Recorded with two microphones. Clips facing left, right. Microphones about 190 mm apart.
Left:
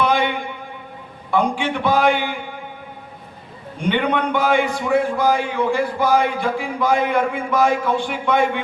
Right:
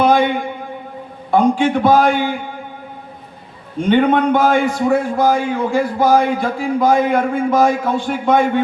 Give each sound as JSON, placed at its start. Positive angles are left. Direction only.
{"t": 0.0, "sound": "a sound", "side_deg": -40}
{"t": 1.3, "sound": "a man's voice", "side_deg": -40}
{"t": 3.8, "sound": "a man's voice", "side_deg": -45}